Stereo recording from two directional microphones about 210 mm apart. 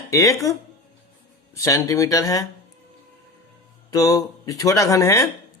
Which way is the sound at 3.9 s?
15° left (ahead or behind).